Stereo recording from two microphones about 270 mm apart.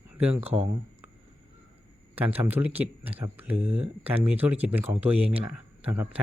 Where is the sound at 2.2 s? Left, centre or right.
Centre.